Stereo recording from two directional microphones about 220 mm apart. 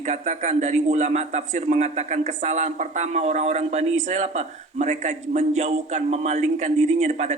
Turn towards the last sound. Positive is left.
turn(degrees=-30)  # may be behind; listen again after turning